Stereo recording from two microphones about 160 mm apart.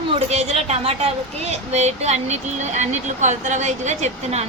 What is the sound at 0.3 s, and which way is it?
A woman's voice, 40° right (ahead or behind).